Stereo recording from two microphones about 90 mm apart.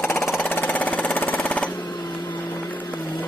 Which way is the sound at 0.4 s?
20° left (ahead or behind).